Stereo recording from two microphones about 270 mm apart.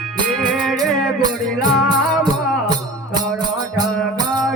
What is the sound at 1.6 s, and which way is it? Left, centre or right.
Music, centre.